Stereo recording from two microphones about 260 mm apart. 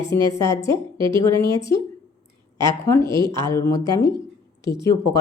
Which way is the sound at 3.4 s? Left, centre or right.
Centre.